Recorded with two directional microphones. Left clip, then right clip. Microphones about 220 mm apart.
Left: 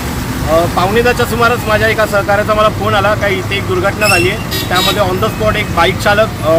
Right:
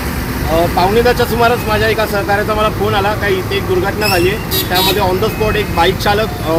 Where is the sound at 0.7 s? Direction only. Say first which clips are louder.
Even; centre (ahead or behind).